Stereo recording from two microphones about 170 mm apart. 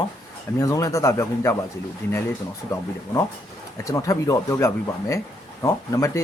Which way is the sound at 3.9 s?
20° left (ahead or behind).